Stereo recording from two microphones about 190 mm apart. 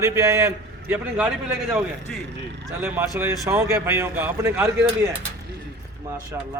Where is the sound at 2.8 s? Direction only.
10° right (ahead or behind).